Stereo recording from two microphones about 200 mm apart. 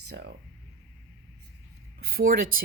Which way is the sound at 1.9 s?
50° right (ahead or behind).